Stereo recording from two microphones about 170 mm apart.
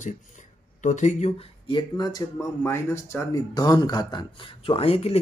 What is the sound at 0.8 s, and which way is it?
Speech, 45° left (ahead or behind).